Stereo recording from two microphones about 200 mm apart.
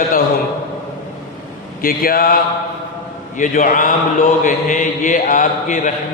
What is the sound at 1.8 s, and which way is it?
A man's voice, 45° left (ahead or behind).